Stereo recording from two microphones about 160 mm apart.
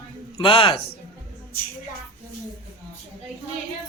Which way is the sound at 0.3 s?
30° left (ahead or behind).